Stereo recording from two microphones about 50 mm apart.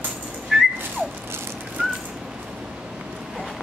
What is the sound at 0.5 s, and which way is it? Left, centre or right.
Whistling, centre.